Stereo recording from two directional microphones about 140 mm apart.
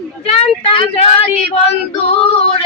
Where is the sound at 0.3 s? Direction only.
40° left (ahead or behind).